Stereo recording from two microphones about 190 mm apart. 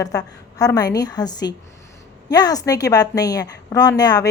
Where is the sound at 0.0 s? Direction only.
20° left (ahead or behind).